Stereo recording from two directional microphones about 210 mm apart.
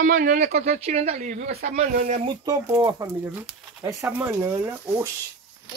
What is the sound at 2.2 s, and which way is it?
Speech, 20° right (ahead or behind).